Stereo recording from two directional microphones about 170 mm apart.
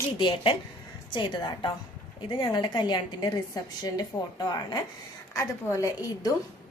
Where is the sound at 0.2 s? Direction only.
30° left (ahead or behind).